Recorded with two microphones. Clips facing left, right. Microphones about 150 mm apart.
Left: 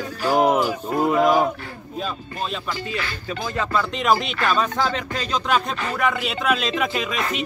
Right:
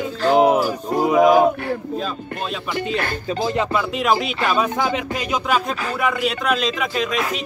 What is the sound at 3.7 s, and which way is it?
Speech, 5° right (ahead or behind).